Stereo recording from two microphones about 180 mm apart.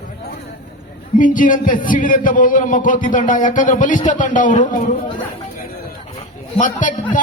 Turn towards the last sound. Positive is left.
turn(degrees=45)  # may be behind; listen again after turning